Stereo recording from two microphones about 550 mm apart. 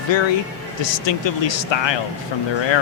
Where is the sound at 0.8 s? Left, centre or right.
Left.